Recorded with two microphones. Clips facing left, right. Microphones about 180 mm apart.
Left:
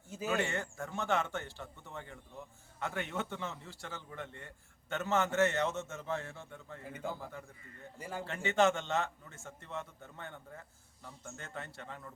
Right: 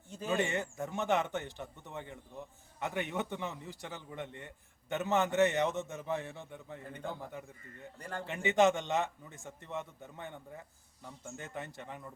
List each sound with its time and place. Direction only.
0.3 s a man's voice: 20° right (ahead or behind)
6.8 s a man's voice: 5° left (ahead or behind)
7.2 s speech: 20° right (ahead or behind)
7.9 s a man's voice: 5° left (ahead or behind)
8.3 s a man's voice: 15° right (ahead or behind)